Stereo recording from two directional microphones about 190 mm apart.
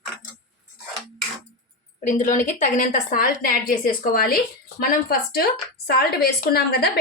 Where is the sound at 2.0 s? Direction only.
40° left (ahead or behind).